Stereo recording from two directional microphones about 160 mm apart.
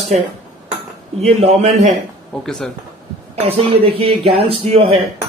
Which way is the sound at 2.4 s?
5° left (ahead or behind).